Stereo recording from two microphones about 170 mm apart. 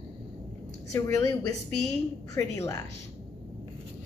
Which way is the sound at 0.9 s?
15° left (ahead or behind).